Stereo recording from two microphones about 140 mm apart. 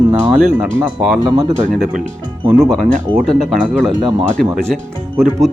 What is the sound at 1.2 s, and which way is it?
Speech, 25° right (ahead or behind).